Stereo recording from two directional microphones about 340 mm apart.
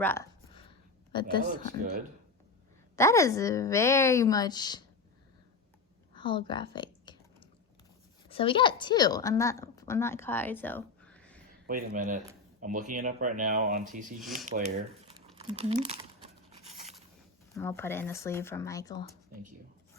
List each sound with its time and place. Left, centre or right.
0.0 s a sound: centre
1.1 s a woman's voice: centre
1.5 s speech: right
2.9 s a woman's voice: centre
6.1 s typing: centre
8.3 s a woman's voice: centre
11.9 s speech: right
15.4 s tearing: centre
17.5 s a woman's voice: centre